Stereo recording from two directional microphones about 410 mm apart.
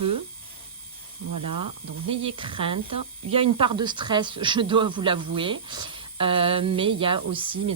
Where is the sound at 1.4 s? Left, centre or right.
Right.